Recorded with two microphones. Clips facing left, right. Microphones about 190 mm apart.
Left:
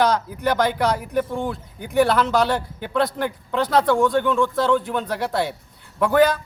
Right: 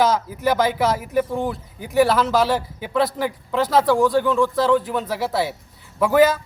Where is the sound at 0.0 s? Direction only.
5° right (ahead or behind).